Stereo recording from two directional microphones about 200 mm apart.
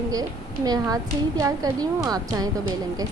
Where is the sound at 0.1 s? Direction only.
20° right (ahead or behind).